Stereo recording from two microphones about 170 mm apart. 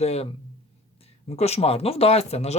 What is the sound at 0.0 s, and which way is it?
Speech, 40° left (ahead or behind).